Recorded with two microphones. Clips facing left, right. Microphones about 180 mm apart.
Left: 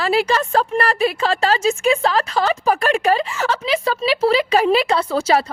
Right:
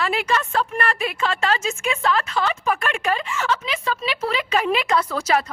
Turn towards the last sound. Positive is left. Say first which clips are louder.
# left 4 dB
turn(degrees=30)  # may be behind; listen again after turning